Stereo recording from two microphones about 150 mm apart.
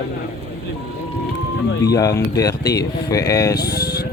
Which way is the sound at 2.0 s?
25° left (ahead or behind).